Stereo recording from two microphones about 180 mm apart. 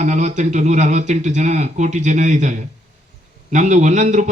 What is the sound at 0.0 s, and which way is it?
A man's voice, 40° right (ahead or behind).